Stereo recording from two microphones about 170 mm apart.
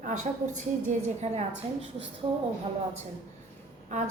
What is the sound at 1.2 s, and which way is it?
Speech, 40° right (ahead or behind).